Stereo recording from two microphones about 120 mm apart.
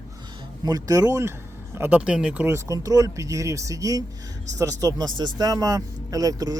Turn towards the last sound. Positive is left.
turn(degrees=-30)  # may be behind; listen again after turning